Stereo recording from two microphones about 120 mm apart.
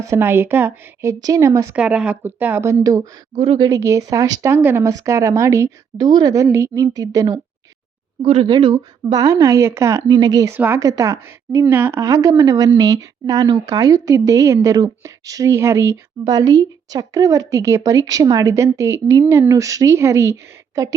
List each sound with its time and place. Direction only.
0.1 s a woman's voice: 20° right (ahead or behind)
1.7 s speech: 10° right (ahead or behind); by 3.1 s 30° right (ahead or behind)
3.3 s speech: 50° right (ahead or behind)
3.6 s a woman's voice: 25° right (ahead or behind)
6.0 s a woman's voice: 40° right (ahead or behind)
6.3 s a woman's voice: 25° right (ahead or behind)
8.2 s speech: 55° right (ahead or behind)
8.4 s a woman's voice: 40° right (ahead or behind)
9.1 s a woman's voice: 25° right (ahead or behind)
10.1 s a woman's voice: 35° right (ahead or behind)
10.5 s a woman's voice: 20° right (ahead or behind)